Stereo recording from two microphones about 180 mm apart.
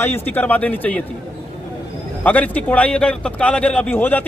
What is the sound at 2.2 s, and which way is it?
Speech, 10° left (ahead or behind).